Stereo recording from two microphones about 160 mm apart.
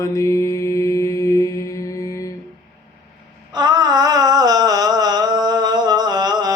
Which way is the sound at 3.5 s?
25° right (ahead or behind).